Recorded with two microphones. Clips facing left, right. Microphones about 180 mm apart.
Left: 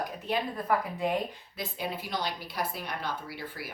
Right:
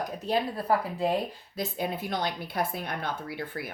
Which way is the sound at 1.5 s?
50° right (ahead or behind).